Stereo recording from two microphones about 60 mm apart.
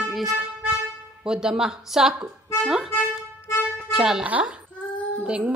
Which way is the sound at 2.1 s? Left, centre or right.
Centre.